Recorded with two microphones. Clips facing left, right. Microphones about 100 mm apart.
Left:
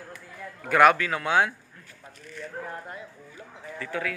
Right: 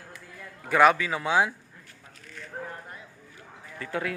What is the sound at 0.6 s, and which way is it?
Speech, centre (ahead or behind).